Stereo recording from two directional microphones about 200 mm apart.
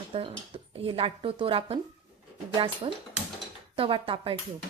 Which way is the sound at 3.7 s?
25° right (ahead or behind).